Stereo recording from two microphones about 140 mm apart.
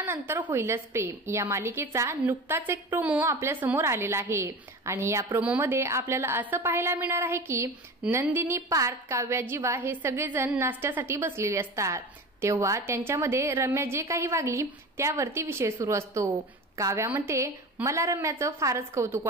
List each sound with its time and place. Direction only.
0.0 s a woman's voice: 15° right (ahead or behind)